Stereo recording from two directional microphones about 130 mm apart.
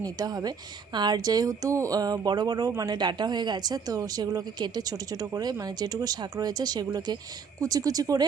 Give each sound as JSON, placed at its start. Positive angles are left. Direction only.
{"t": 0.0, "sound": "speech", "side_deg": -30}